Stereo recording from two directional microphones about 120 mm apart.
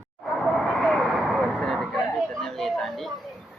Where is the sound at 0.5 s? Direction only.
Centre (ahead or behind).